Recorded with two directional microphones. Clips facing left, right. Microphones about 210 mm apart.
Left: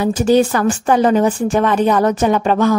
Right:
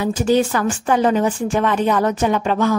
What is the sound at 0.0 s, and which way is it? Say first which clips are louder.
A woman's voice: left 4 dB; 40° left (ahead or behind).